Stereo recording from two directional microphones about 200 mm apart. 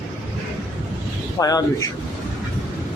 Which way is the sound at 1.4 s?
20° left (ahead or behind).